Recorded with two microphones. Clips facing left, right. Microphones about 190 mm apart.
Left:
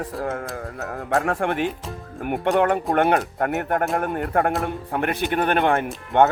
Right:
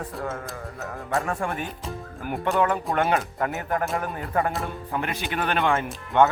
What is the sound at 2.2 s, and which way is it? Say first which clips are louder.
Speech: left 4 dB; 65° left (ahead or behind).